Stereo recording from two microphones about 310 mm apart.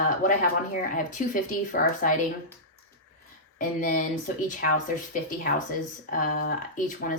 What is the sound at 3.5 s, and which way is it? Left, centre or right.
Speech, left.